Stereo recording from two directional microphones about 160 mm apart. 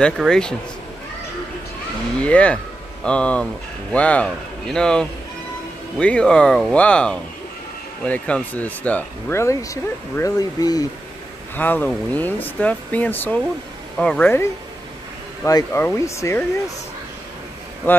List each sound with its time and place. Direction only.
0.0 s speech: 5° left (ahead or behind)
2.2 s speech: 10° left (ahead or behind); by 10.9 s 25° left (ahead or behind)
11.5 s speech: 10° left (ahead or behind)